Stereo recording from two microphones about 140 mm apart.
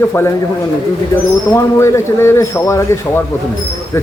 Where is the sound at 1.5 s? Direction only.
20° left (ahead or behind).